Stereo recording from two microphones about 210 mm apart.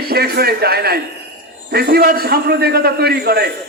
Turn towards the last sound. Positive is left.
turn(degrees=-50)  # may be behind; listen again after turning